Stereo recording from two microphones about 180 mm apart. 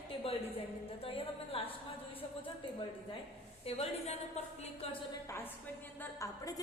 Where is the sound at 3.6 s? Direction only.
35° left (ahead or behind).